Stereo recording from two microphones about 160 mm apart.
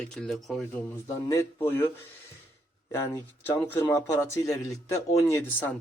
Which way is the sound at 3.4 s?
10° left (ahead or behind).